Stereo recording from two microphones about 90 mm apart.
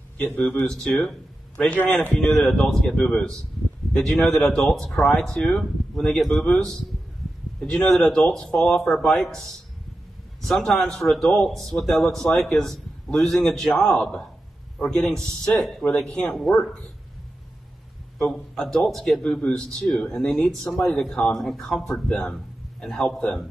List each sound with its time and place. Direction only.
0.7 s speech: 10° left (ahead or behind)
2.1 s a man's voice: 5° left (ahead or behind)
10.4 s a man's voice: 5° left (ahead or behind)
18.2 s a man's voice: 5° left (ahead or behind)